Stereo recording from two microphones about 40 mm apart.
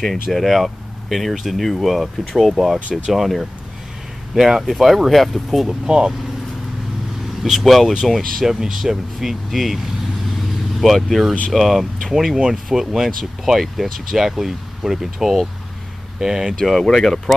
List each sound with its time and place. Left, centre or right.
0.0 s speech: centre
5.7 s speech: centre
7.4 s speech: centre
10.8 s speech: centre
16.5 s speech: centre